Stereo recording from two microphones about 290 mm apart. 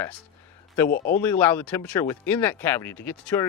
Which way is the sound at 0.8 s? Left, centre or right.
Left.